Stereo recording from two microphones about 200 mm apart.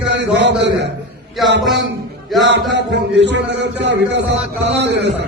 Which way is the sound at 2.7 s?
60° right (ahead or behind).